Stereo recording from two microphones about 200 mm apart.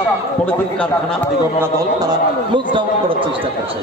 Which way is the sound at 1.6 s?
20° right (ahead or behind).